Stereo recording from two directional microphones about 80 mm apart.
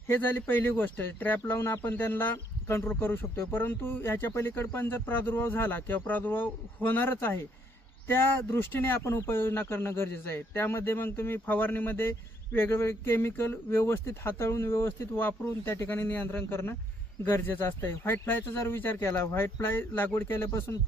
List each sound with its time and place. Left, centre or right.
0.1 s speech: left
1.5 s a man's voice: left